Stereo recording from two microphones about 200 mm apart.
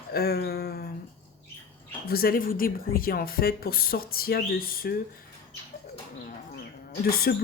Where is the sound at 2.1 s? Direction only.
50° left (ahead or behind).